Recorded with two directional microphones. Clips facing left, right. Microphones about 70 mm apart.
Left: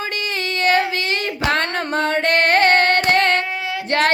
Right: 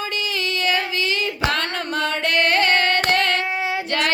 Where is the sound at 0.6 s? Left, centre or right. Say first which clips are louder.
Left 6 dB; left.